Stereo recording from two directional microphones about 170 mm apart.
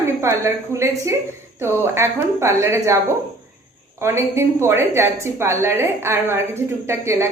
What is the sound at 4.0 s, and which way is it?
A woman's voice, 15° right (ahead or behind).